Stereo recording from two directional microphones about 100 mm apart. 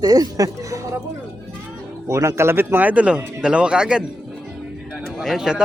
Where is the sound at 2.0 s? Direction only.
30° right (ahead or behind); by 4.0 s 10° right (ahead or behind).